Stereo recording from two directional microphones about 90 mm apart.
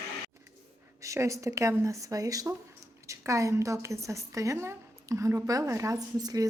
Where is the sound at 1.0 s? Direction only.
35° right (ahead or behind).